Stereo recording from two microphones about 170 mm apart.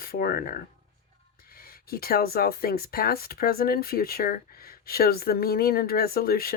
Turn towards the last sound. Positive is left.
turn(degrees=60)  # may be behind; listen again after turning